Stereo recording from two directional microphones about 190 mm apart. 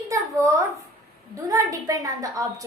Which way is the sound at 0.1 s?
15° right (ahead or behind).